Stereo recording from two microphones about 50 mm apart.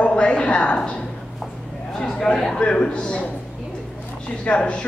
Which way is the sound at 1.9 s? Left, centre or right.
Centre.